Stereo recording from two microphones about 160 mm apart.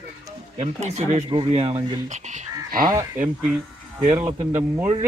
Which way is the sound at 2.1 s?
50° right (ahead or behind).